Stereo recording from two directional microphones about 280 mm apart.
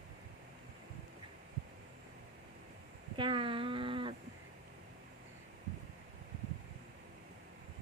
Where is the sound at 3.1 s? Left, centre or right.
Centre.